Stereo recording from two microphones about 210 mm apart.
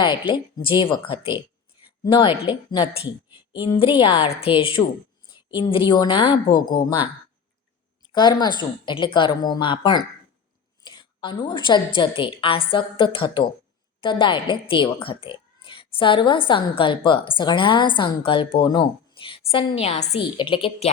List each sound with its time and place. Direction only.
0.0 s speech: 20° left (ahead or behind)
2.5 s speech: 20° left (ahead or behind)
6.6 s speech: 40° left (ahead or behind)
8.0 s speech: 20° left (ahead or behind)